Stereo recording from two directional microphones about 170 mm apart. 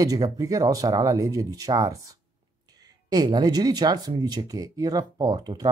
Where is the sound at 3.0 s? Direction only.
25° right (ahead or behind).